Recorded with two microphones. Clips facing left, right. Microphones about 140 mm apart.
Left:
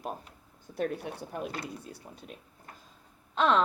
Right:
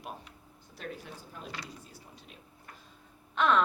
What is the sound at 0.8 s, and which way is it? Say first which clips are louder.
Speech: left 10 dB; 65° left (ahead or behind).